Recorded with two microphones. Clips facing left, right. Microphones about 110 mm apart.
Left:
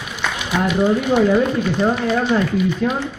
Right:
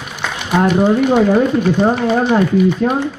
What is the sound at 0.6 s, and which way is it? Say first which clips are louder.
Speech: right 5 dB; 45° right (ahead or behind).